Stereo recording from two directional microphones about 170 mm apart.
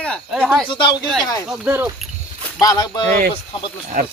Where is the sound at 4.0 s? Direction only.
50° right (ahead or behind).